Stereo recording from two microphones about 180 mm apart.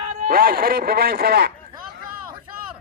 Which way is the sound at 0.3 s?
55° right (ahead or behind).